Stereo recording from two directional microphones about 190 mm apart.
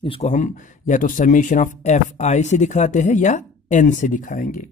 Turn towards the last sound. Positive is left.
turn(degrees=45)  # may be behind; listen again after turning